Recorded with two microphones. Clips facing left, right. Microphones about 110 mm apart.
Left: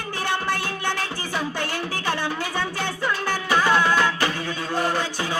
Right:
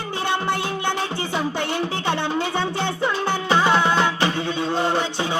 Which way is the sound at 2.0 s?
20° right (ahead or behind).